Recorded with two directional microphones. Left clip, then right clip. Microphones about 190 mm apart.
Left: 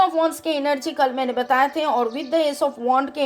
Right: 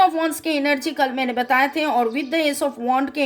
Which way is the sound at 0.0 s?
15° right (ahead or behind).